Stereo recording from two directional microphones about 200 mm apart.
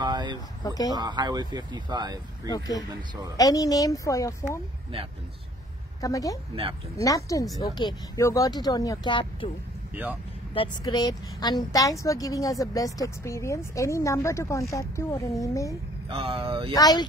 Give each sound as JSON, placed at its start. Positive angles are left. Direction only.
{"t": 0.0, "sound": "a sound", "side_deg": -20}
{"t": 0.7, "sound": "speech", "side_deg": 20}
{"t": 0.9, "sound": "speech", "side_deg": -20}
{"t": 2.5, "sound": "a woman's voice", "side_deg": 20}
{"t": 5.9, "sound": "a woman's voice", "side_deg": 15}
{"t": 10.5, "sound": "a woman's voice", "side_deg": 25}
{"t": 16.1, "sound": "speech", "side_deg": -30}
{"t": 16.7, "sound": "speech", "side_deg": 20}